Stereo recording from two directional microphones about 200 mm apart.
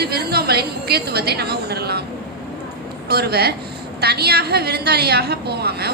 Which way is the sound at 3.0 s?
50° right (ahead or behind).